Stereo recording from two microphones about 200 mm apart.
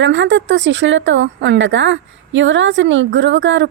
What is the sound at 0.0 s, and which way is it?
Speech, 65° right (ahead or behind).